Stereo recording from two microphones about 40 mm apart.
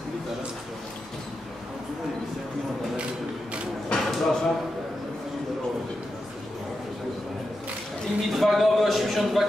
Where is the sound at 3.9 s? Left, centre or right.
Centre.